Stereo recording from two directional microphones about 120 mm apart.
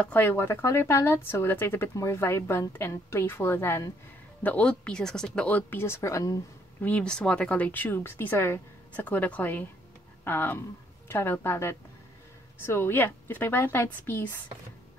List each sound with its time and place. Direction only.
0.0 s a woman's voice: 15° left (ahead or behind)
6.8 s a woman's voice: 10° left (ahead or behind)